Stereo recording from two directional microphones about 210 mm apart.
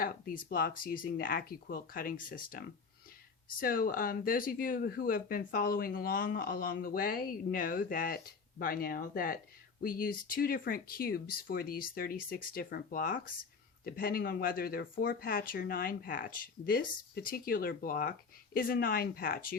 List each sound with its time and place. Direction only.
0.4 s speech: 40° left (ahead or behind)